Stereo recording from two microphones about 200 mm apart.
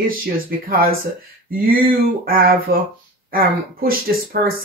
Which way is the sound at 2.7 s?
50° right (ahead or behind).